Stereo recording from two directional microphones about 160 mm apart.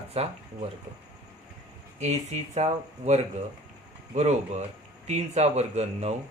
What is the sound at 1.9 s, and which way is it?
Speech, 45° right (ahead or behind).